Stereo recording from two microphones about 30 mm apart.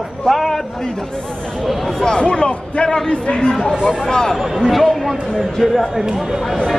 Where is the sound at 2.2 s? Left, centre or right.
Left.